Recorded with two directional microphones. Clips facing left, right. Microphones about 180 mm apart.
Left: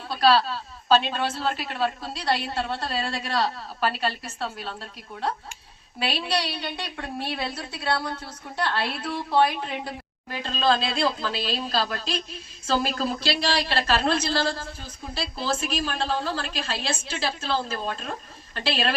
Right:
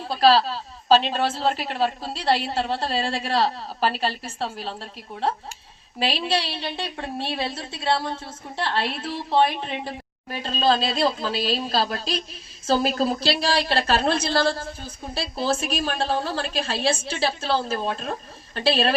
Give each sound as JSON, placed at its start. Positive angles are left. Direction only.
{"t": 0.1, "sound": "a woman's voice", "side_deg": -30}
{"t": 10.4, "sound": "a woman's voice", "side_deg": -35}